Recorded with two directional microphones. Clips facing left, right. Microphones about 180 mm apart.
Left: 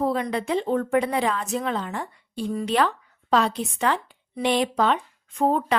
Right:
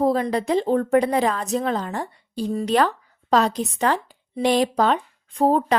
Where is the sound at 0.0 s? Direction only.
40° right (ahead or behind).